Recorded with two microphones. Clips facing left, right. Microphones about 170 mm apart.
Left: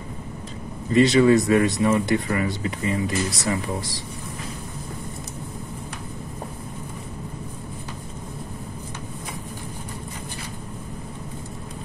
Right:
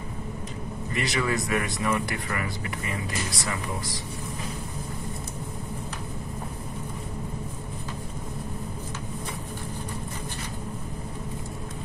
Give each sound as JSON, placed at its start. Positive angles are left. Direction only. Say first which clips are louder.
{"t": 0.9, "sound": "speech", "louder": "left 12 dB", "side_deg": 25}